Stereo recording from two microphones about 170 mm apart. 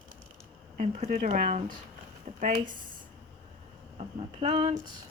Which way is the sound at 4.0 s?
35° right (ahead or behind).